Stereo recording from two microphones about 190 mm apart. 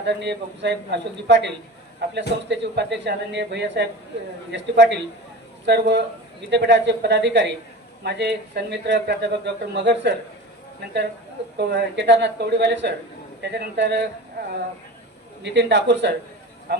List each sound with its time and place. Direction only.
0.0 s speech: 65° right (ahead or behind)
11.5 s speech: 65° right (ahead or behind)
15.4 s speech: 65° right (ahead or behind)